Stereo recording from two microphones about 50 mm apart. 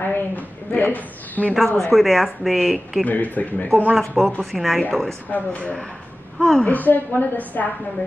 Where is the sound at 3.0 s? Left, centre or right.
Left.